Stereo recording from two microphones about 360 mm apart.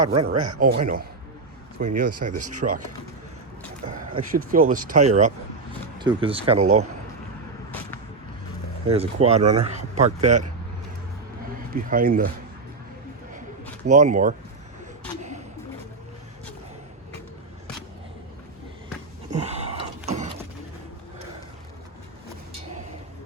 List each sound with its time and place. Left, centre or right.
0.0 s speech: centre
2.6 s speech: right
4.1 s speech: right
7.7 s vehicle: centre
8.9 s speech: centre
11.7 s speech: right
13.8 s speech: centre
19.4 s a sound: centre